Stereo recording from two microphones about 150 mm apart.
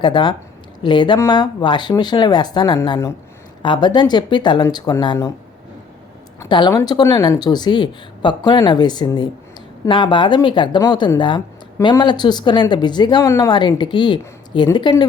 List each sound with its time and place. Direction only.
0.0 s speech: 30° left (ahead or behind)
6.4 s speech: 25° left (ahead or behind)